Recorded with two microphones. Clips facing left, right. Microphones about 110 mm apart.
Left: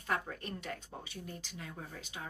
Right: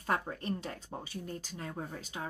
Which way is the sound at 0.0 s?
35° right (ahead or behind).